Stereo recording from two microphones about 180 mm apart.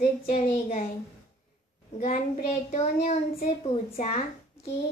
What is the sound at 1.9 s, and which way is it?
A child's voice, 40° left (ahead or behind).